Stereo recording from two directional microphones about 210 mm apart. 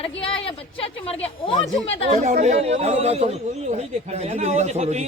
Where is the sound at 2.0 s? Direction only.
35° right (ahead or behind).